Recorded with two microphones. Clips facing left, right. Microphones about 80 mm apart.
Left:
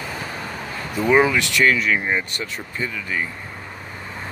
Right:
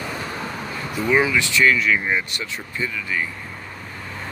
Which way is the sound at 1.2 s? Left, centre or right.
Left.